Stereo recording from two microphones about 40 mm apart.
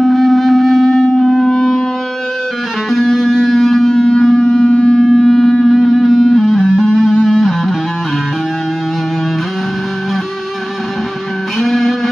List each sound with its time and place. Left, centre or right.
0.0 s wind instrument: centre
2.9 s music: centre
4.2 s a sound: centre
4.6 s music: centre
4.9 s sine wave: centre
5.7 s music: centre
11.6 s music: centre